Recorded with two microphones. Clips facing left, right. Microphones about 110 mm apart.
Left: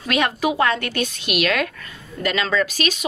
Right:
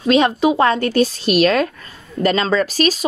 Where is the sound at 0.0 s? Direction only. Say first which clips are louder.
Right 7 dB; 25° right (ahead or behind).